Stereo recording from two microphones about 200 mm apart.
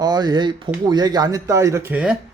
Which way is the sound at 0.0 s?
20° right (ahead or behind).